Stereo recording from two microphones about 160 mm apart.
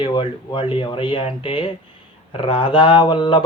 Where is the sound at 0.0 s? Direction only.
30° left (ahead or behind).